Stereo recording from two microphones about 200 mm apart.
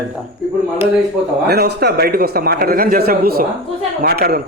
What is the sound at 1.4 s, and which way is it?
A man's voice, 55° right (ahead or behind).